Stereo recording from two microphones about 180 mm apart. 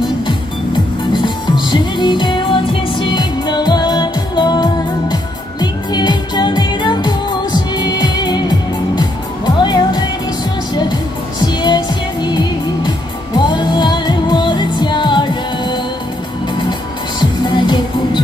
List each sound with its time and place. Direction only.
1.1 s music: 25° left (ahead or behind)
11.4 s music: 25° left (ahead or behind)
17.2 s music: 25° left (ahead or behind)